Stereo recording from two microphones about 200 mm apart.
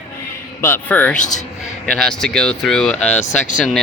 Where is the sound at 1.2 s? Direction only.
40° left (ahead or behind).